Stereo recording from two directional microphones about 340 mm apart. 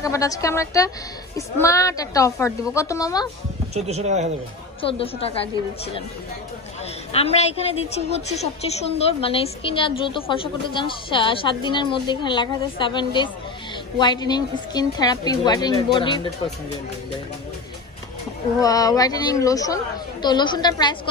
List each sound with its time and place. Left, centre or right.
0.0 s a woman's voice: centre
3.7 s speech: centre
4.8 s a woman's voice: centre
7.1 s a woman's voice: centre
18.6 s a woman's voice: centre